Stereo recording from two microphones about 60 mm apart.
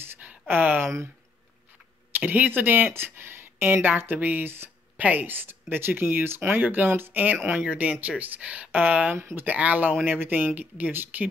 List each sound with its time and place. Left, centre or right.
0.2 s a sound: right
2.1 s speech: right
7.6 s speech: right
9.1 s speech: right